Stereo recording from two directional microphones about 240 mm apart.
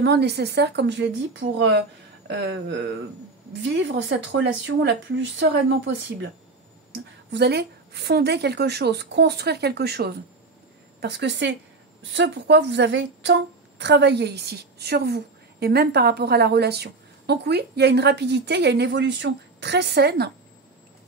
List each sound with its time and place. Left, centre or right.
0.0 s a woman's voice: right
7.2 s a woman's voice: right